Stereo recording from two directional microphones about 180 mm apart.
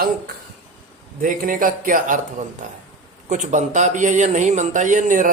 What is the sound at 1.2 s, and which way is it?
Speech, 50° right (ahead or behind).